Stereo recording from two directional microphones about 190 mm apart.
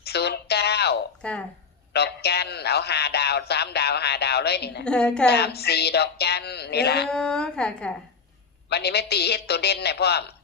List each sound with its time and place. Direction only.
0.0 s a sound: 60° left (ahead or behind)
1.2 s speech: 5° left (ahead or behind)
1.9 s a man's voice: 60° left (ahead or behind)
4.9 s a woman's voice: 5° left (ahead or behind)
5.3 s a sound: 60° left (ahead or behind)
7.1 s a woman's voice: 5° left (ahead or behind)
8.7 s a man's voice: 60° left (ahead or behind)